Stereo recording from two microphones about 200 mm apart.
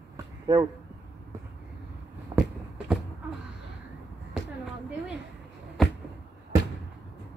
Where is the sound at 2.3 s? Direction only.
15° right (ahead or behind).